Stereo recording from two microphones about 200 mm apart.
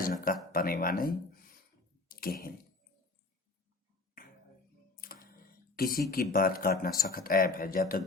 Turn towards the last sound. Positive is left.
turn(degrees=45)  # may be behind; listen again after turning